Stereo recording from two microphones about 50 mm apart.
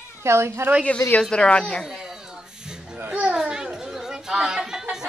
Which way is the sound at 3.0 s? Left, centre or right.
Right.